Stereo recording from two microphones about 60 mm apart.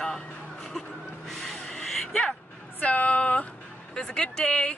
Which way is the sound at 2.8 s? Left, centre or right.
Left.